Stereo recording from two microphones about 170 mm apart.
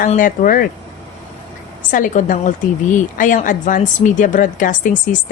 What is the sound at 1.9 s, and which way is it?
A woman's voice, 50° left (ahead or behind).